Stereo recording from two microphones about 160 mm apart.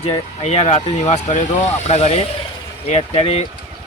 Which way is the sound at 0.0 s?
40° left (ahead or behind).